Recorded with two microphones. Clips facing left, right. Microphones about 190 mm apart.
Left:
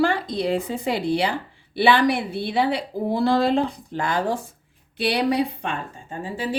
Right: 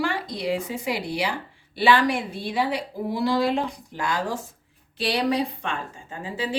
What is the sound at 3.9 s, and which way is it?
A woman's voice, 60° left (ahead or behind).